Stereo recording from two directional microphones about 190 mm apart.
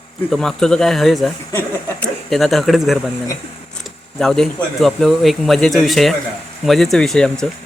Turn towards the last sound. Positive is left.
turn(degrees=5)  # may be behind; listen again after turning